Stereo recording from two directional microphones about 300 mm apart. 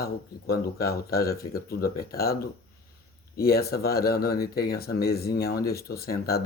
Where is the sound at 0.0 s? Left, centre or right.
Left.